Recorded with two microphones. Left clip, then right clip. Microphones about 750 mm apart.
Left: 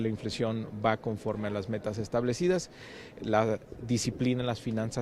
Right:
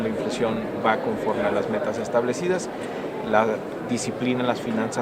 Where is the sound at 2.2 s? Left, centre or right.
Left.